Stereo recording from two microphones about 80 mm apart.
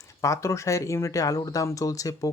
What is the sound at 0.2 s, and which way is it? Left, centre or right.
Speech, left.